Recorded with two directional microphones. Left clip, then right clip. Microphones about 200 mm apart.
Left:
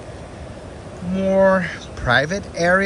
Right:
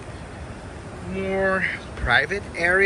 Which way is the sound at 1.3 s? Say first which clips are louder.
Left 8 dB; 55° right (ahead or behind).